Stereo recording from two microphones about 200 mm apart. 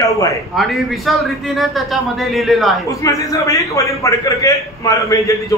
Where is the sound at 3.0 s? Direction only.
15° left (ahead or behind).